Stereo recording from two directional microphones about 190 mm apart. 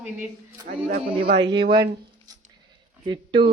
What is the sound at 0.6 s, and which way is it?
Speech, 45° right (ahead or behind).